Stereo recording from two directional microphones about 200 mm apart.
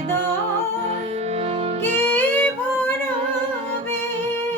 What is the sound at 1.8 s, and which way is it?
Music, 10° left (ahead or behind).